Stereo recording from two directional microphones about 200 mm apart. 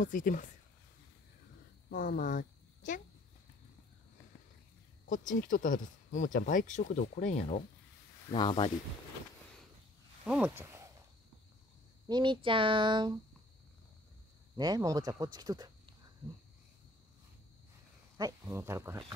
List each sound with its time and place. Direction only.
0.0 s speech: 40° left (ahead or behind)
1.9 s a woman's voice: 40° left (ahead or behind)
5.1 s speech: 40° left (ahead or behind)
8.3 s speech: 25° left (ahead or behind)
10.2 s speech: 5° right (ahead or behind)
12.1 s speech: 25° right (ahead or behind)
14.6 s speech: 20° right (ahead or behind)
18.1 s speech: 15° right (ahead or behind)